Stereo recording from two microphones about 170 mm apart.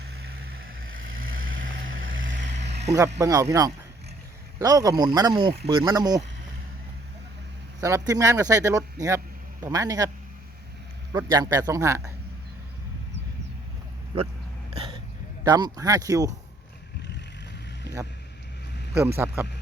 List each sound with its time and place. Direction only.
2.2 s vehicle: 90° right
3.2 s speech: 20° right (ahead or behind)
7.8 s speech: 20° right (ahead or behind)
11.1 s speech: 20° right (ahead or behind)
14.7 s hiccup: 30° right (ahead or behind)
15.4 s speech: 20° right (ahead or behind)
18.9 s speech: 15° right (ahead or behind)